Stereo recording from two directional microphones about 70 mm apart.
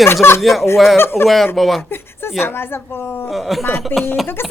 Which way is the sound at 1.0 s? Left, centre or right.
Left.